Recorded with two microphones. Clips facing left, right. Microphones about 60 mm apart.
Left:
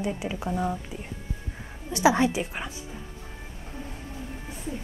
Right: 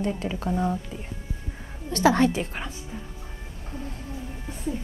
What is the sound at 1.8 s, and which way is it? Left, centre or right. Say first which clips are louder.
Speech: right 1 dB; centre.